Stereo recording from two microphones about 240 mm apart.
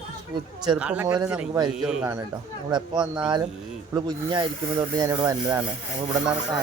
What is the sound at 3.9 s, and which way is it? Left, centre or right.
Speech, centre.